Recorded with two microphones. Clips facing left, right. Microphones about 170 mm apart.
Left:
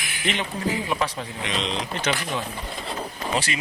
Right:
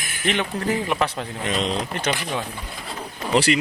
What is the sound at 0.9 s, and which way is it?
Speech, 60° right (ahead or behind).